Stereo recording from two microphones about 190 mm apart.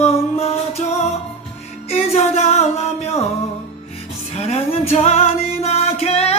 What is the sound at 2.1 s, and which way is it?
Music, 35° left (ahead or behind).